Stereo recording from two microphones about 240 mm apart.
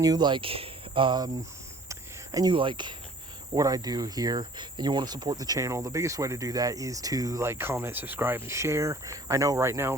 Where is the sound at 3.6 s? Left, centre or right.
Centre.